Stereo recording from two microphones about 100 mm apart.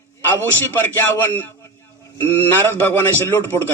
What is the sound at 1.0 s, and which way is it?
Speech, 20° left (ahead or behind).